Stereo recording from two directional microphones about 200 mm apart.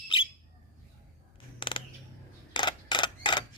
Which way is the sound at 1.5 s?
25° left (ahead or behind).